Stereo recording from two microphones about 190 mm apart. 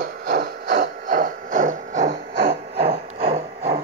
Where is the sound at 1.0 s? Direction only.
45° right (ahead or behind).